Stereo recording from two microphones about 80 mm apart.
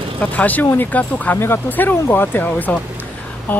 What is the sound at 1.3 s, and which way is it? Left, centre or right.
Speech, left.